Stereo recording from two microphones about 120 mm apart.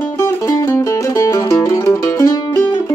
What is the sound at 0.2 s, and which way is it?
Music, 25° left (ahead or behind).